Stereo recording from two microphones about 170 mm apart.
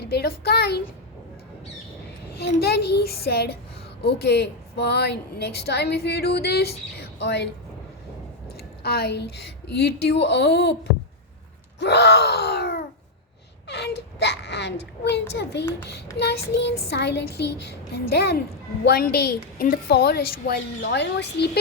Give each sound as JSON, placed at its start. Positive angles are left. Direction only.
{"t": 0.0, "sound": "a woman's voice", "side_deg": 70}
{"t": 2.3, "sound": "a woman's voice", "side_deg": 70}
{"t": 8.5, "sound": "a woman's voice", "side_deg": 70}
{"t": 11.8, "sound": "a woman's voice", "side_deg": 80}
{"t": 13.7, "sound": "whimper", "side_deg": 80}
{"t": 15.3, "sound": "a child's voice", "side_deg": 90}
{"t": 16.1, "sound": "child singing", "side_deg": 75}
{"t": 16.9, "sound": "a woman's voice", "side_deg": 80}